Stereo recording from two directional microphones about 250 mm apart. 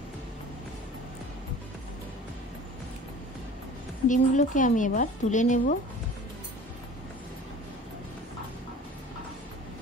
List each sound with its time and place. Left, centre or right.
4.1 s speech: left